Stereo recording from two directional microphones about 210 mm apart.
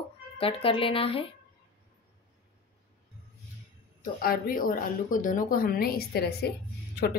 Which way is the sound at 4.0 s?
45° left (ahead or behind).